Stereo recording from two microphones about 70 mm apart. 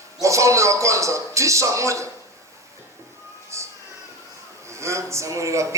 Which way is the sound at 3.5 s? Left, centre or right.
Right.